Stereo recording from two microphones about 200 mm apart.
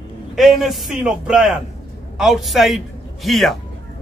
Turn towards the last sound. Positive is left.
turn(degrees=0)  # may be behind; listen again after turning